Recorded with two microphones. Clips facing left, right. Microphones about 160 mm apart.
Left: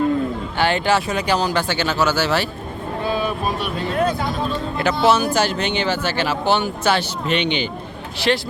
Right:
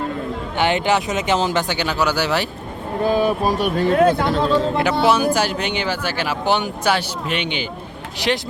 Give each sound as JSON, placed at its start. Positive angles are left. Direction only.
{"t": 0.5, "sound": "speech", "side_deg": -20}
{"t": 3.0, "sound": "speech", "side_deg": -45}
{"t": 4.2, "sound": "speech", "side_deg": -80}
{"t": 5.0, "sound": "speech", "side_deg": -10}